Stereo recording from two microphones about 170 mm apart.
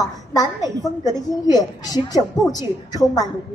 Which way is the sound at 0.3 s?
20° left (ahead or behind).